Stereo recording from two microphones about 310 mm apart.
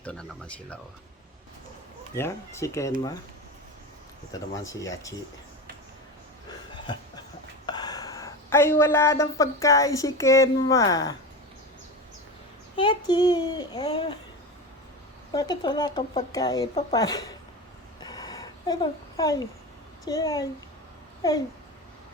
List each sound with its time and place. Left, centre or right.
0.0 s speech: centre
2.1 s speech: centre
4.5 s speech: centre
6.9 s a woman's voice: centre
12.7 s speech: centre
15.3 s speech: centre
18.0 s a sound: centre
20.1 s a child's voice: centre